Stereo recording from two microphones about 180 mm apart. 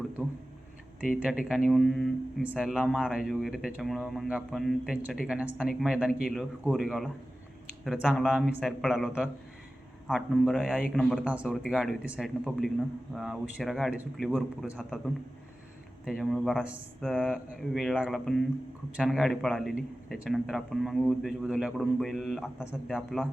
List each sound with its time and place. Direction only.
0.2 s speech: 5° right (ahead or behind)